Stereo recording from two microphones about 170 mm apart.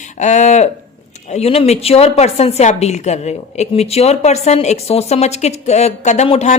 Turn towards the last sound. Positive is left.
turn(degrees=40)  # may be behind; listen again after turning